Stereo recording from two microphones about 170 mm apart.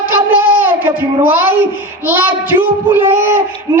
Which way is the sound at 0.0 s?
10° right (ahead or behind).